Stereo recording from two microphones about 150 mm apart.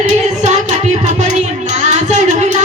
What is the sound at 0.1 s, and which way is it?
Music, 50° right (ahead or behind).